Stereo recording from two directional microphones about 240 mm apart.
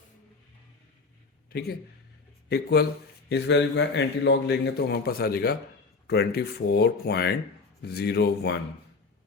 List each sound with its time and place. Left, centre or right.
1.5 s a man's voice: left